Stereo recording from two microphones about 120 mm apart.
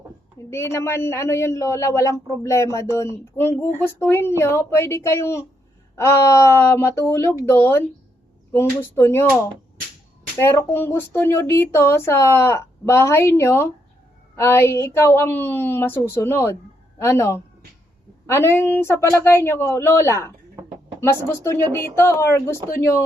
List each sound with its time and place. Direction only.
0.5 s speech: 20° left (ahead or behind)
10.3 s speech: 25° left (ahead or behind)
21.7 s speech: 20° left (ahead or behind)